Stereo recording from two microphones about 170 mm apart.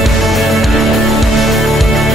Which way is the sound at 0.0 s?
Centre (ahead or behind).